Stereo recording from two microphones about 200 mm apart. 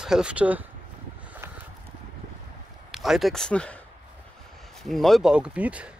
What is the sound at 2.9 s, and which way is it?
Speech, centre (ahead or behind).